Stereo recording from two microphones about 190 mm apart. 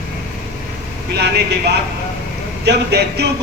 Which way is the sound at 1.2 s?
60° right (ahead or behind).